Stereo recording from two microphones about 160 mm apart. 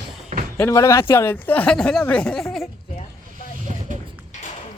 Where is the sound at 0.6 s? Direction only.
20° left (ahead or behind).